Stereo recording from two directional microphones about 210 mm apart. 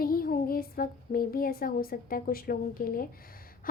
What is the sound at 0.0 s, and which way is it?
Speech, 45° left (ahead or behind).